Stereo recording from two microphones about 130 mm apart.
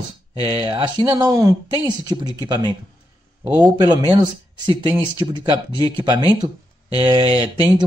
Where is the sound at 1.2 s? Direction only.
25° right (ahead or behind).